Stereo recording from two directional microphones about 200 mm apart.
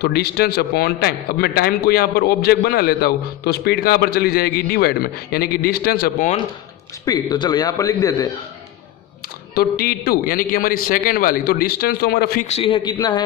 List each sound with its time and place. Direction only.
0.0 s a man's voice: 55° left (ahead or behind)
7.1 s speech: 20° left (ahead or behind)
9.6 s a man's voice: 50° left (ahead or behind)
12.4 s speech: 30° left (ahead or behind)